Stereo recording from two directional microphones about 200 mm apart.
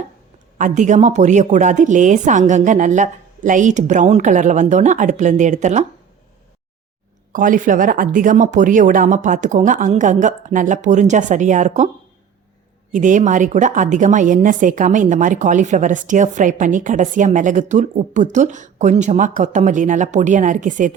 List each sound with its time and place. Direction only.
0.6 s a woman's voice: 40° right (ahead or behind)
7.3 s a woman's voice: 40° right (ahead or behind)
12.9 s a woman's voice: 40° right (ahead or behind)